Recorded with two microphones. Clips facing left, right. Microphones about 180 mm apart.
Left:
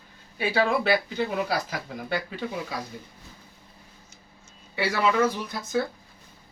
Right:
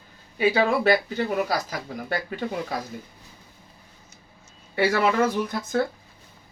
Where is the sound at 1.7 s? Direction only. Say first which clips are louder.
Right 1 dB; 50° right (ahead or behind).